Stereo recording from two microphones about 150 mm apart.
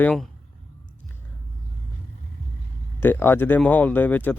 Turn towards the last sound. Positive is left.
turn(degrees=10)  # may be behind; listen again after turning